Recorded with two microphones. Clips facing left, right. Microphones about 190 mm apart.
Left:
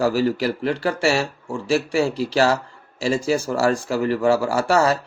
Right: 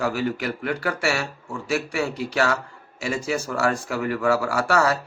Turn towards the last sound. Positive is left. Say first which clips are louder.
# left 3 dB
turn(degrees=25)  # may be behind; listen again after turning